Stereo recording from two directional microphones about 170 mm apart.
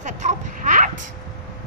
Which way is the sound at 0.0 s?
45° right (ahead or behind).